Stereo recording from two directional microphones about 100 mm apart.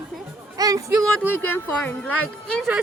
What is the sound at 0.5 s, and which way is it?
Speech, 35° right (ahead or behind).